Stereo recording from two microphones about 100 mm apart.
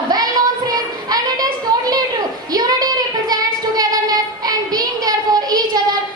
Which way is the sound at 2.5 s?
40° right (ahead or behind).